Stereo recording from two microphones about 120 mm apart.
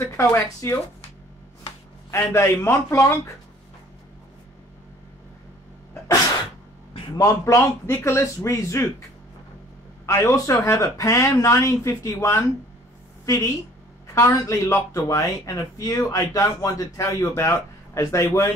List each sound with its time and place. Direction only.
0.0 s speech: 20° left (ahead or behind)
2.0 s speech: 20° left (ahead or behind)
7.2 s speech: 25° left (ahead or behind)
10.0 s a woman's voice: 25° left (ahead or behind)